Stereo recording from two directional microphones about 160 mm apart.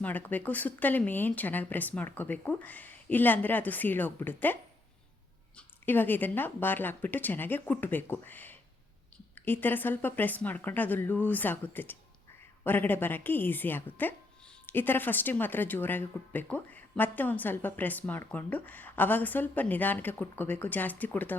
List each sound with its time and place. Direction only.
0.0 s a woman's voice: 10° left (ahead or behind)
5.5 s a woman's voice: 10° left (ahead or behind)